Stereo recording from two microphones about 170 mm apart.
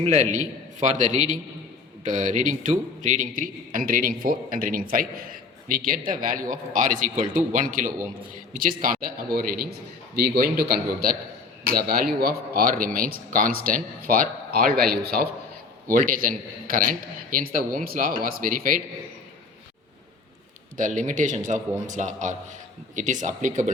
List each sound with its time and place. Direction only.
0.0 s a man's voice: 45° right (ahead or behind); by 15.3 s 65° right (ahead or behind)
15.9 s speech: 55° right (ahead or behind)
20.7 s a man's voice: 50° right (ahead or behind)